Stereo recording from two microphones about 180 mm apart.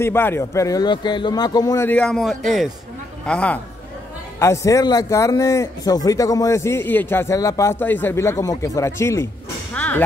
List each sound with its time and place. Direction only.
0.0 s speech: 15° left (ahead or behind)
1.9 s a man's voice: 5° left (ahead or behind)
9.8 s music: 10° left (ahead or behind)